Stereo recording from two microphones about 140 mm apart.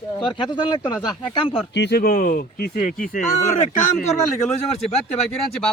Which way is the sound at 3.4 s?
55° left (ahead or behind).